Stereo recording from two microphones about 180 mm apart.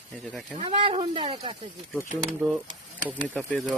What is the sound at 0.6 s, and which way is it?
Speech, 30° right (ahead or behind).